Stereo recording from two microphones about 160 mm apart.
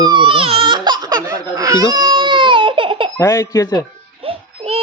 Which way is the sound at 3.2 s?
15° left (ahead or behind).